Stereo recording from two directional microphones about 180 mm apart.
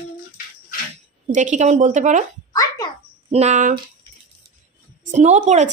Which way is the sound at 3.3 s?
40° right (ahead or behind).